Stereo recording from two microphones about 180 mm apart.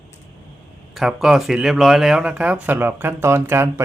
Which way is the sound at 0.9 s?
Centre (ahead or behind).